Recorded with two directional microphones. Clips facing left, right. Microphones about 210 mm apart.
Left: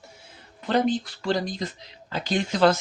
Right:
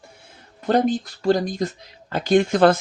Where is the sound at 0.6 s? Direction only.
45° right (ahead or behind).